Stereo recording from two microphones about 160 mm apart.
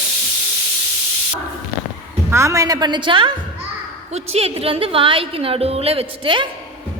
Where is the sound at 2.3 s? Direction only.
20° right (ahead or behind).